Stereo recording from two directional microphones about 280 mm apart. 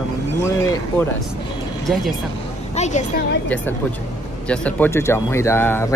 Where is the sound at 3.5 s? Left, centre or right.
Centre.